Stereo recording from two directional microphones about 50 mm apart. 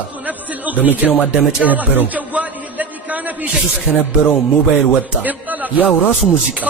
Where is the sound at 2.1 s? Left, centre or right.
Right.